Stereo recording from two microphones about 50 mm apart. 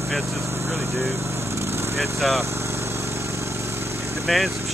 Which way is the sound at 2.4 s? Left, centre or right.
Right.